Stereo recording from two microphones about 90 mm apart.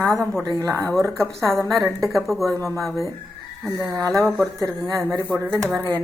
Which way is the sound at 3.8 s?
35° right (ahead or behind).